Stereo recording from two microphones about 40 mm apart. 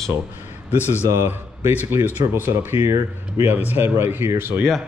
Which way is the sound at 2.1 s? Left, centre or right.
Right.